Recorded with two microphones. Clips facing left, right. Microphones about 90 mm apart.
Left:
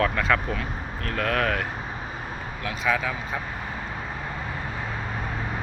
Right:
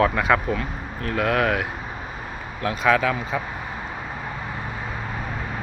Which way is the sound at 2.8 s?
75° right (ahead or behind).